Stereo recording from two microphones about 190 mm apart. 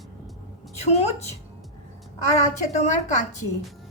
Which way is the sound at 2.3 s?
35° left (ahead or behind).